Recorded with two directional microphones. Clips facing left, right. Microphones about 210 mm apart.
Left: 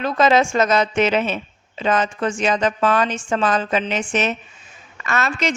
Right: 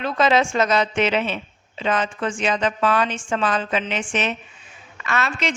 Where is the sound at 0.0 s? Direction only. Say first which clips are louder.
Left 2 dB; 45° left (ahead or behind).